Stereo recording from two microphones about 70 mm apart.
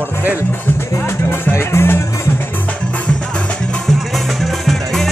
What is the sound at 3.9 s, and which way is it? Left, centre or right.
Music, centre.